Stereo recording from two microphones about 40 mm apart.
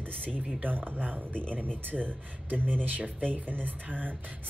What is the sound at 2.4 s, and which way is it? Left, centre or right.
Speech, right.